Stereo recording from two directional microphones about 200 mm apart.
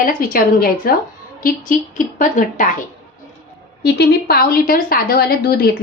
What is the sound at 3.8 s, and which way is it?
A woman's voice, 55° left (ahead or behind).